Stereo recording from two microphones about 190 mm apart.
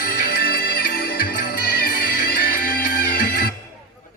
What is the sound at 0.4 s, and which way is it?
Music, 50° left (ahead or behind).